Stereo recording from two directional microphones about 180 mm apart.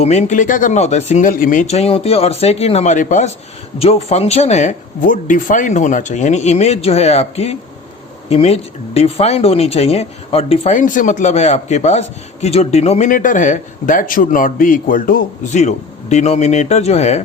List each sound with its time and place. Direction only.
0.0 s speech: 40° left (ahead or behind)